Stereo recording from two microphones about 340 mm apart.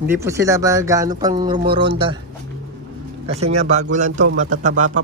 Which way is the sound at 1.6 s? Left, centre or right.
Right.